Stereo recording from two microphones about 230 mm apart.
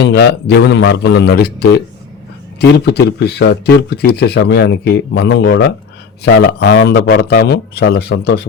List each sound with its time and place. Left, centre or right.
0.0 s speech: left